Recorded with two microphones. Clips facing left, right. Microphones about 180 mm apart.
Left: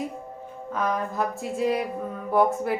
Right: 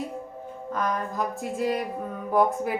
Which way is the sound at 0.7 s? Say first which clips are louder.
Left 1 dB; 5° left (ahead or behind).